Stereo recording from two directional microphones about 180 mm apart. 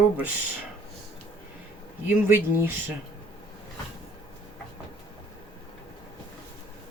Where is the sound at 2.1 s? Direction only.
10° right (ahead or behind).